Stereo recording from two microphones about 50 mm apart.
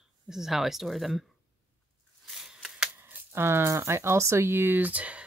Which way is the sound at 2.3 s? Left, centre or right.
Centre.